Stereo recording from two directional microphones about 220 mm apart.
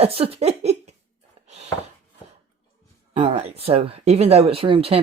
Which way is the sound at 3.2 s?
25° right (ahead or behind).